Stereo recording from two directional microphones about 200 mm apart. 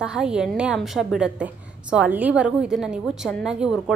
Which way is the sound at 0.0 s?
5° right (ahead or behind).